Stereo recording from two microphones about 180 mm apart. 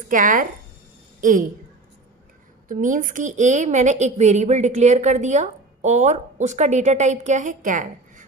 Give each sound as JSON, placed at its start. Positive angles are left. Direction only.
{"t": 0.1, "sound": "speech", "side_deg": -45}
{"t": 2.7, "sound": "a woman's voice", "side_deg": -45}